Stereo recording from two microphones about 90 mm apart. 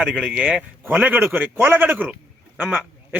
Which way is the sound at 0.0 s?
10° right (ahead or behind).